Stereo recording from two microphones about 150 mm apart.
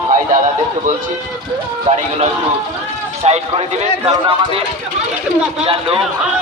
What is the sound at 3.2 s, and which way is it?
A man's voice, 45° right (ahead or behind).